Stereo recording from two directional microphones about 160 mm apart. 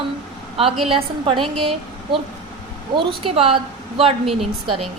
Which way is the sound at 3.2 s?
35° right (ahead or behind).